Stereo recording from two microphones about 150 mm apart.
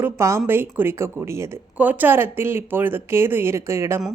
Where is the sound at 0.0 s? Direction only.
20° right (ahead or behind).